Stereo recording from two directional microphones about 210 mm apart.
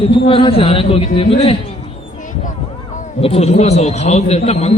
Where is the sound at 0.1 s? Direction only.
25° left (ahead or behind).